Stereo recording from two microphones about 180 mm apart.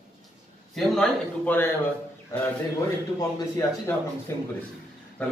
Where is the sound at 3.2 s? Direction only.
15° left (ahead or behind).